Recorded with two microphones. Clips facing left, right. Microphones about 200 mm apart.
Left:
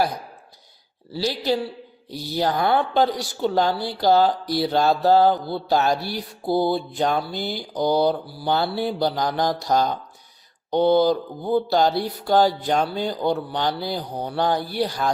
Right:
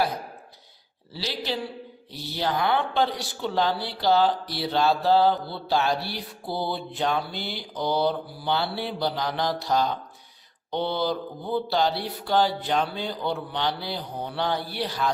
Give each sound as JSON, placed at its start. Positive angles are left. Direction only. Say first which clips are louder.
{"t": 2.3, "sound": "a woman's voice", "louder": "left 4 dB", "side_deg": 40}
{"t": 5.5, "sound": "music", "louder": "left 4 dB", "side_deg": 40}